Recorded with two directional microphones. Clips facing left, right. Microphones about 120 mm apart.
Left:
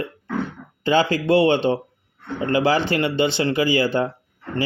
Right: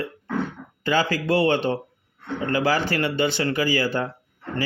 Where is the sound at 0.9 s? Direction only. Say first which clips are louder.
Left 4 dB; 25° left (ahead or behind).